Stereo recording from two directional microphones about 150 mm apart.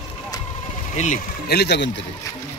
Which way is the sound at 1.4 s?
90° left.